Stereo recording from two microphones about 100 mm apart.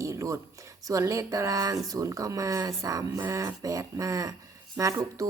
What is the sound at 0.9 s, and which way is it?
A woman's voice, 30° right (ahead or behind).